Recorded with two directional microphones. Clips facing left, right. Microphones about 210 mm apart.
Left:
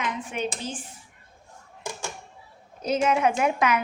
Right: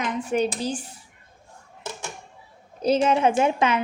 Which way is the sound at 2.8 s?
30° right (ahead or behind).